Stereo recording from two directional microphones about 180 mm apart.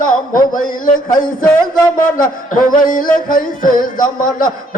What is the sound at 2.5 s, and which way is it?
Music, 50° left (ahead or behind).